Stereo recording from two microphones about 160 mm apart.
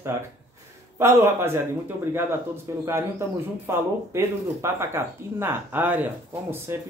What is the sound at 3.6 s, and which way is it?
Speech, 15° right (ahead or behind).